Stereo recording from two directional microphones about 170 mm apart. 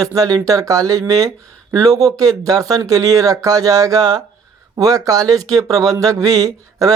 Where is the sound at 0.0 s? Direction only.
20° right (ahead or behind).